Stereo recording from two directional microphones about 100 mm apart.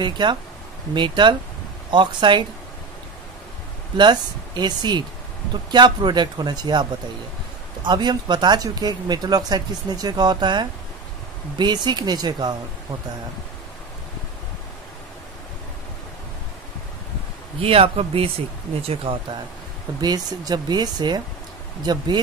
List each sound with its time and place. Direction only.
0.0 s speech: 50° right (ahead or behind)
3.9 s speech: 50° right (ahead or behind)
17.6 s speech: 70° right (ahead or behind)
20.0 s speech: 45° right (ahead or behind)